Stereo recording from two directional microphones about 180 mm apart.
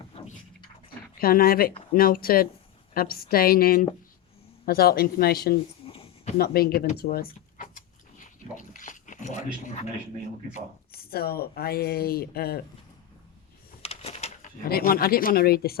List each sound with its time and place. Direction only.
1.2 s speech: 55° left (ahead or behind)
5.8 s a sound: 30° left (ahead or behind)
6.3 s speech: 60° left (ahead or behind)
8.2 s dog: 45° left (ahead or behind)
10.9 s speech: 60° left (ahead or behind)
13.8 s a sound: 35° left (ahead or behind)
14.7 s speech: 55° left (ahead or behind)